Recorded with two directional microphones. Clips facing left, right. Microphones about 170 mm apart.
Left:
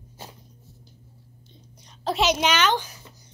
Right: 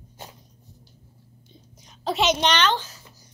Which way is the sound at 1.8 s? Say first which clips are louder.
Even; centre (ahead or behind).